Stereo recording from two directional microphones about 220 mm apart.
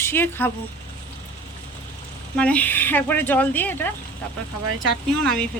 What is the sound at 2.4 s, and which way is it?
Speech, 5° left (ahead or behind).